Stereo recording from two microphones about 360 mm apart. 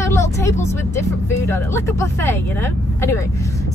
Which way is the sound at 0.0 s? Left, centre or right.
Centre.